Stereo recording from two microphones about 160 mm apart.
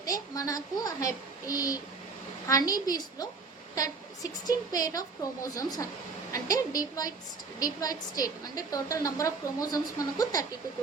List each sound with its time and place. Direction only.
0.0 s a woman's voice: 20° left (ahead or behind)